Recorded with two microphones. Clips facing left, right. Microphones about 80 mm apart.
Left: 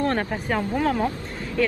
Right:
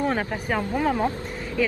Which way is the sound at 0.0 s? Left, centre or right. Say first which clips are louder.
Left 1 dB; centre.